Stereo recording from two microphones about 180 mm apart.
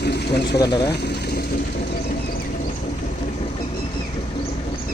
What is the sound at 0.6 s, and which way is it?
Speech, 20° left (ahead or behind).